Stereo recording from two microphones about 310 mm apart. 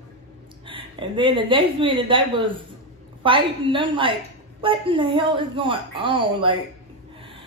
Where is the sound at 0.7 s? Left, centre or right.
Centre.